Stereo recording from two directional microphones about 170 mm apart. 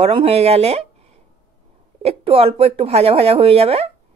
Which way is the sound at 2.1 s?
35° right (ahead or behind).